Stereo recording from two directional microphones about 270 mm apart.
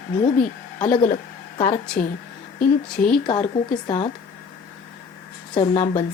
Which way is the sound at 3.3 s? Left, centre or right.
Centre.